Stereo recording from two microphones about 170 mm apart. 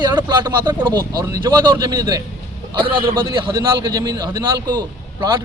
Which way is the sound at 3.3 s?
25° right (ahead or behind).